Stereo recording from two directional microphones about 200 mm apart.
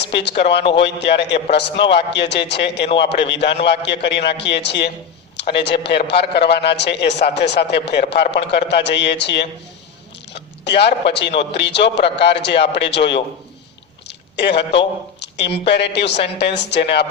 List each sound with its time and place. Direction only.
0.0 s speech: 60° left (ahead or behind)
0.6 s speech: 25° left (ahead or behind)
0.9 s speech: 60° left (ahead or behind)
6.1 s speech: 60° left (ahead or behind)
10.3 s chewing: 55° left (ahead or behind)
11.3 s speech: 60° left (ahead or behind)
14.1 s a sound: 60° left (ahead or behind)
14.8 s speech: 60° left (ahead or behind)